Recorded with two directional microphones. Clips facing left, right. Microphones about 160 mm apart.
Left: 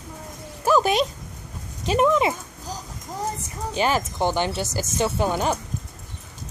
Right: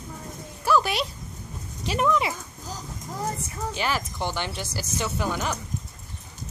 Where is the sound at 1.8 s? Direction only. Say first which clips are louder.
Left 5 dB; 25° left (ahead or behind).